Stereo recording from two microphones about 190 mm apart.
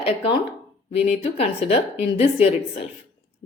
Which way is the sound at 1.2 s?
30° left (ahead or behind).